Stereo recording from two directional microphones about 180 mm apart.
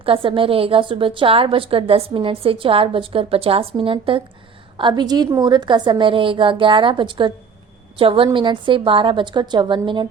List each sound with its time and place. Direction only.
0.0 s a woman's voice: 30° right (ahead or behind)